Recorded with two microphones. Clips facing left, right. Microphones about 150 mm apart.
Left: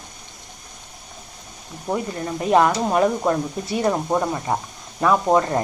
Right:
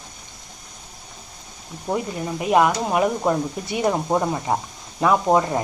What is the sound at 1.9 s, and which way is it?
Speech, 10° right (ahead or behind).